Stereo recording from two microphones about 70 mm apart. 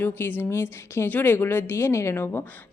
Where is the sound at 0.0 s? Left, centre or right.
Left.